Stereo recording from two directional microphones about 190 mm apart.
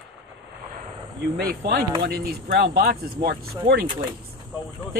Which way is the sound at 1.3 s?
55° right (ahead or behind).